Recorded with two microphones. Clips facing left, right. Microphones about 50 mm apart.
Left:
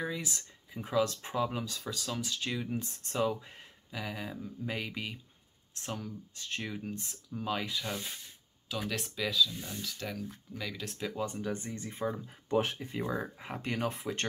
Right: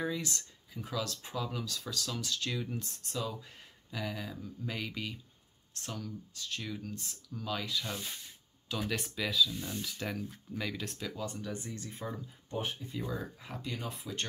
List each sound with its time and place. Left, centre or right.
0.0 s a sound: centre
0.7 s speech: left
3.1 s speech: left
3.9 s speech: centre
8.6 s speech: centre
11.0 s speech: centre
12.4 s speech: left
12.9 s speech: left
13.6 s speech: left